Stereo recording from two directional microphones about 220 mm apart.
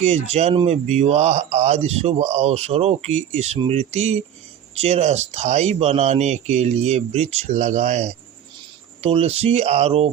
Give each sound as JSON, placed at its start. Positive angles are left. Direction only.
{"t": 0.0, "sound": "speech", "side_deg": -30}